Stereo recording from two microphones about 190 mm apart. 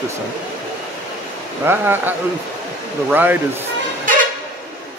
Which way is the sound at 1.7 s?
10° right (ahead or behind).